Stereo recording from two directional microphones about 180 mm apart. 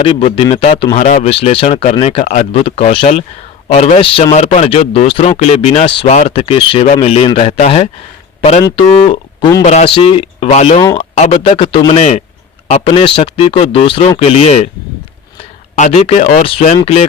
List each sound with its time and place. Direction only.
0.0 s a man's voice: 30° left (ahead or behind)
8.9 s a man's voice: 35° left (ahead or behind)
15.8 s a man's voice: 35° left (ahead or behind)